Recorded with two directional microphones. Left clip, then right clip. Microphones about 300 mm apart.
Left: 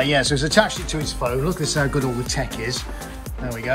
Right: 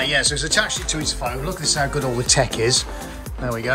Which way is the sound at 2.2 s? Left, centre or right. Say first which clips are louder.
Right 8 dB; centre.